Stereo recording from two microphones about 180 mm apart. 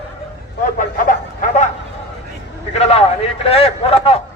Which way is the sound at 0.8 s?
50° left (ahead or behind).